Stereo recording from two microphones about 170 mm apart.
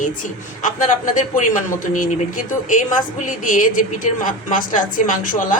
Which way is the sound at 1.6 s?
50° left (ahead or behind).